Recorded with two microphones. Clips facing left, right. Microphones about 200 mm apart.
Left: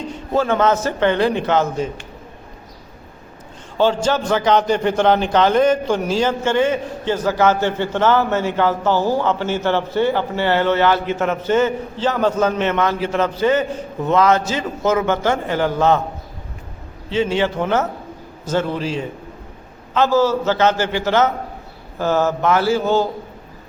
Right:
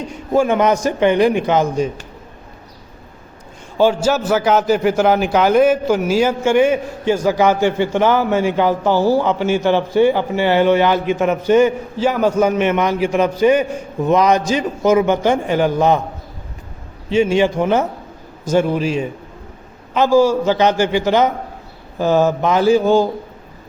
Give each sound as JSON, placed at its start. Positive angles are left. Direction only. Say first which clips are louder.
{"t": 0.3, "sound": "a man's voice", "louder": "right 2 dB", "side_deg": -15}
{"t": 3.8, "sound": "a man's voice", "louder": "right 2 dB", "side_deg": -10}
{"t": 17.1, "sound": "a man's voice", "louder": "right 4 dB", "side_deg": -15}